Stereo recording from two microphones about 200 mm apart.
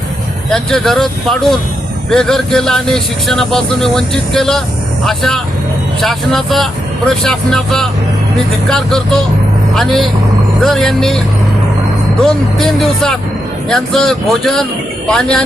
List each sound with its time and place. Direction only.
0.5 s speech: centre (ahead or behind)
12.2 s speech: centre (ahead or behind)